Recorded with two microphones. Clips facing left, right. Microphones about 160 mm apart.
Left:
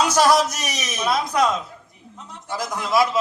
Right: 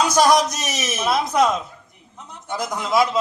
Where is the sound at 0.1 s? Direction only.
15° right (ahead or behind).